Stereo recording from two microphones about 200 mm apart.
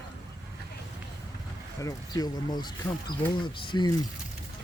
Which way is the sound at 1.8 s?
20° left (ahead or behind).